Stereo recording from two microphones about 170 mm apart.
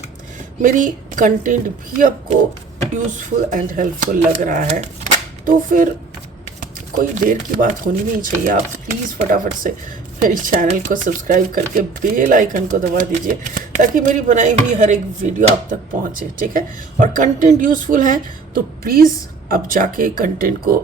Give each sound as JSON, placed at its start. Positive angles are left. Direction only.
{"t": 0.6, "sound": "speech", "side_deg": -45}
{"t": 6.9, "sound": "speech", "side_deg": -55}
{"t": 16.5, "sound": "speech", "side_deg": -50}